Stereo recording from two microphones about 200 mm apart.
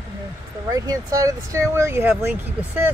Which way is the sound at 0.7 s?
15° right (ahead or behind).